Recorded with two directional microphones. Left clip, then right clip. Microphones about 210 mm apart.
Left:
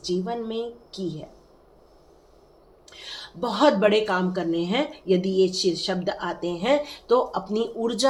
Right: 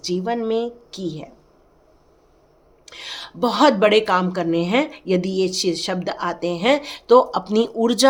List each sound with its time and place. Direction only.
0.0 s speech: 50° right (ahead or behind)
2.8 s speech: 45° right (ahead or behind)